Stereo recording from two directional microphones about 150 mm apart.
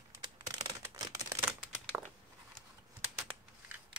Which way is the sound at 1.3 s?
10° right (ahead or behind).